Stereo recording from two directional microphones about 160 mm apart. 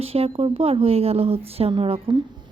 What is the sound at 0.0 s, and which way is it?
A woman's voice, 40° right (ahead or behind).